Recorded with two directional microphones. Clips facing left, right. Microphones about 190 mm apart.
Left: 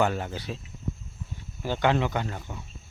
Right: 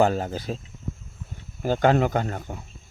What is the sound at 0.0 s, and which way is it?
Speech, 40° right (ahead or behind).